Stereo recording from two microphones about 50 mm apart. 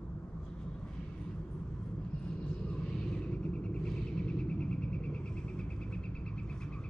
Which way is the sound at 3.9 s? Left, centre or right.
Centre.